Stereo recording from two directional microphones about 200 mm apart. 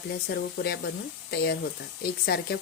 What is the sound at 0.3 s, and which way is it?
Speech, 50° left (ahead or behind).